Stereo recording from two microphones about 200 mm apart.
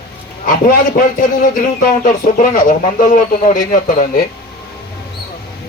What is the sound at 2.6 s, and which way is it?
A man's voice, 40° left (ahead or behind).